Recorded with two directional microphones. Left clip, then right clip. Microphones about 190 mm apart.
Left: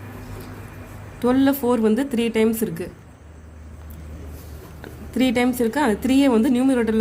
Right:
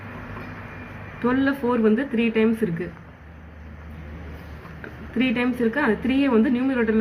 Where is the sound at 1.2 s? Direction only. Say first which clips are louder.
Left 3 dB; 90° left.